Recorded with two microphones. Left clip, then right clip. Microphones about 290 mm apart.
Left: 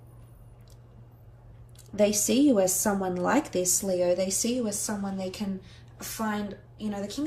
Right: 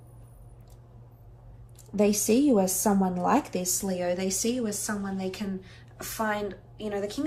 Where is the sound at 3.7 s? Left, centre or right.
Centre.